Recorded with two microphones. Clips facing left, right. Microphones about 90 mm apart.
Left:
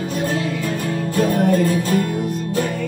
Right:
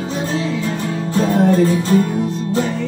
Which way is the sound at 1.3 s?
20° right (ahead or behind).